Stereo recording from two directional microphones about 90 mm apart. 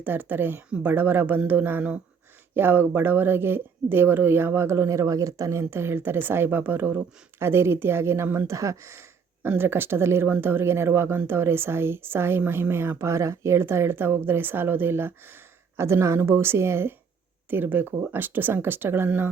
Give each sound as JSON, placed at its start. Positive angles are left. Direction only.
{"t": 0.0, "sound": "speech", "side_deg": -20}